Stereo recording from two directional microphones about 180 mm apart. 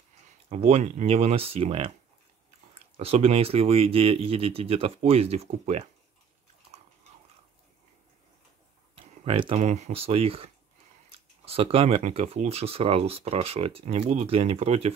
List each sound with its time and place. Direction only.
0.5 s speech: 35° right (ahead or behind)
8.9 s speech: 30° right (ahead or behind)